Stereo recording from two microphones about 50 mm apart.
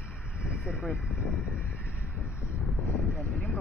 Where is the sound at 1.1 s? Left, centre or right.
Right.